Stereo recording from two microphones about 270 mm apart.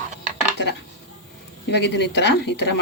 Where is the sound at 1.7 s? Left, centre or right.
Left.